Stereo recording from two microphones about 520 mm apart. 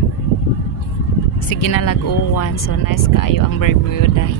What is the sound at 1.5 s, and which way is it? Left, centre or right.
Speech, left.